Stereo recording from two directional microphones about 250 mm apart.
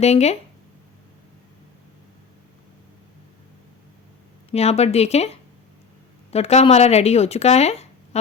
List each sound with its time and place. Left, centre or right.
0.0 s speech: left
4.5 s speech: left